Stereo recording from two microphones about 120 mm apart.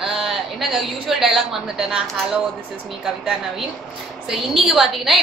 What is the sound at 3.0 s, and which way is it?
A woman's voice, 5° right (ahead or behind).